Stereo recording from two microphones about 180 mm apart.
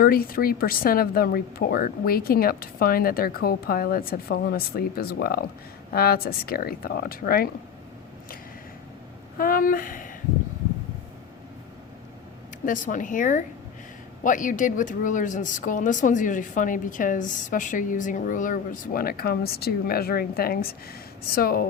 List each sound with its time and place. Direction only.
0.0 s a woman's voice: 55° left (ahead or behind)
9.4 s a woman's voice: 50° left (ahead or behind)
12.6 s a woman's voice: 45° left (ahead or behind)